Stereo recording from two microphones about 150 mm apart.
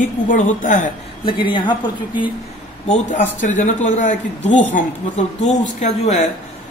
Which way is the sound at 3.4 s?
55° left (ahead or behind).